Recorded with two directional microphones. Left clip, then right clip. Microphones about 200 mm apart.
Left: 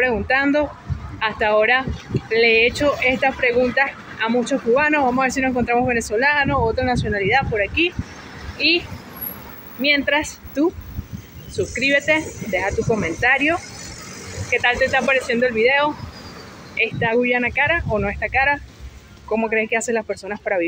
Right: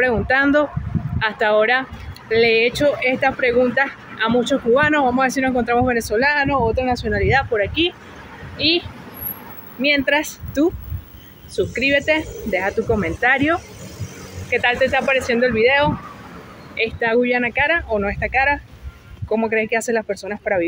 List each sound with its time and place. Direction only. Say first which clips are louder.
0.0 s speech: right 2 dB; 10° right (ahead or behind)
14.5 s speech: even; 5° right (ahead or behind)